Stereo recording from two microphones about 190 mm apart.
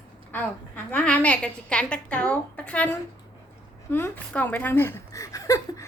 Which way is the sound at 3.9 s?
10° left (ahead or behind).